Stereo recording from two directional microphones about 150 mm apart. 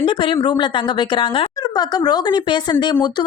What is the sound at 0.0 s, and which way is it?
A woman's voice, 35° left (ahead or behind).